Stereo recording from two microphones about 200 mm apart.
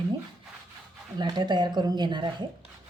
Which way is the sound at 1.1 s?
20° right (ahead or behind).